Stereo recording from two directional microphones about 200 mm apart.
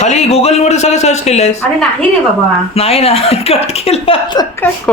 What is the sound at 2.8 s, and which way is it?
Speech, 30° left (ahead or behind).